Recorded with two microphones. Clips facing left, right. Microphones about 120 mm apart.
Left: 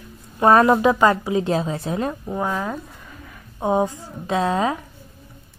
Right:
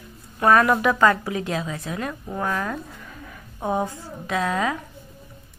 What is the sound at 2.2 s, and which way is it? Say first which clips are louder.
A woman's voice: left 2 dB; 15° left (ahead or behind).